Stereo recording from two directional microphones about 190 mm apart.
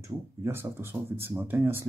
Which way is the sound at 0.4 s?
10° right (ahead or behind).